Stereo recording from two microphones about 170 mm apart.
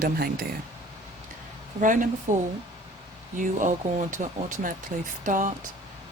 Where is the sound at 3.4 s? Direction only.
50° right (ahead or behind).